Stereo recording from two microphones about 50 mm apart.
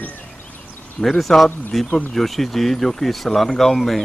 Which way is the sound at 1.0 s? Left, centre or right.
Centre.